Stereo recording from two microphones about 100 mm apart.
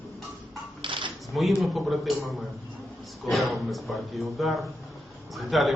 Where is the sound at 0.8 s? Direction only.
55° right (ahead or behind).